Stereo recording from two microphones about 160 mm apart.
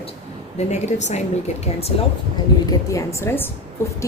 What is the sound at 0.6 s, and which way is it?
Speech, 45° left (ahead or behind).